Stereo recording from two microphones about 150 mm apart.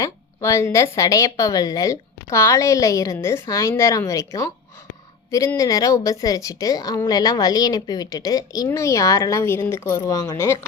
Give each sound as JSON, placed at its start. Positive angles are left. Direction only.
{"t": 0.0, "sound": "a woman's voice", "side_deg": 20}
{"t": 5.5, "sound": "a woman's voice", "side_deg": 25}